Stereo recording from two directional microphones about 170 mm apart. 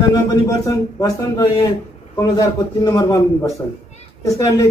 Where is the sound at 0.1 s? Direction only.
20° left (ahead or behind).